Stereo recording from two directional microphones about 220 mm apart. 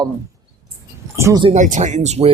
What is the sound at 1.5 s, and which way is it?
Speech, 35° right (ahead or behind).